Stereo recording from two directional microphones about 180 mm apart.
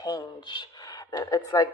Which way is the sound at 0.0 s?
25° left (ahead or behind).